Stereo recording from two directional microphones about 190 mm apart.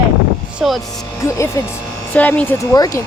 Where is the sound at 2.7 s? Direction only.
20° left (ahead or behind).